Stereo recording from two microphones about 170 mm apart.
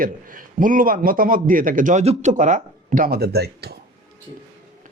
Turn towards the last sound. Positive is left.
turn(degrees=-70)  # may be behind; listen again after turning